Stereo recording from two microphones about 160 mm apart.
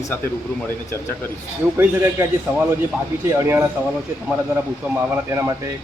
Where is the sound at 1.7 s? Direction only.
15° right (ahead or behind).